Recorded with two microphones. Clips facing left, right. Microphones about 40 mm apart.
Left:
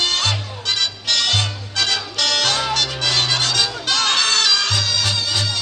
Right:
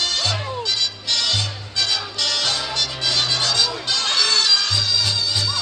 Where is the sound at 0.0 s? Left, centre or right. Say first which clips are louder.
Left 2 dB; left.